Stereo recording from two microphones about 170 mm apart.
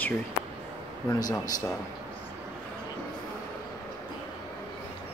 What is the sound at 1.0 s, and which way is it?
Speech, 20° left (ahead or behind).